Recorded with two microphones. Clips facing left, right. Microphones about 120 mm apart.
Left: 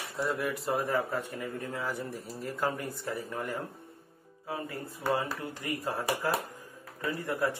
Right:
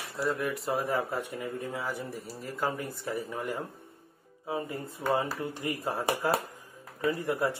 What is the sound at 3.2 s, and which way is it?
Speech, 15° right (ahead or behind).